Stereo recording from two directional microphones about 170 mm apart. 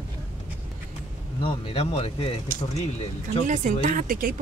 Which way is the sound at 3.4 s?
45° right (ahead or behind).